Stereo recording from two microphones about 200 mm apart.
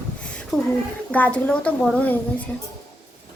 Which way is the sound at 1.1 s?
5° left (ahead or behind).